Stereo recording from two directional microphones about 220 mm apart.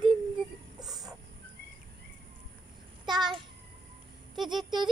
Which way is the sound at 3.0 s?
20° right (ahead or behind).